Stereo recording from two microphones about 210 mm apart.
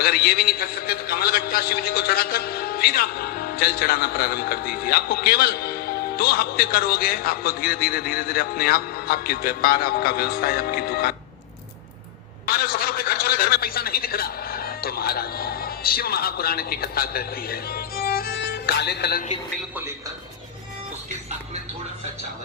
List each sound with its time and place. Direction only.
0.0 s a man's voice: 45° left (ahead or behind)
12.5 s a sound: 45° left (ahead or behind)
18.4 s speech: 50° left (ahead or behind)
19.7 s a man's voice: 10° right (ahead or behind)